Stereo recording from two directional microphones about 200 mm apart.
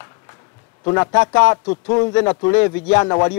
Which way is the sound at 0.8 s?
20° left (ahead or behind).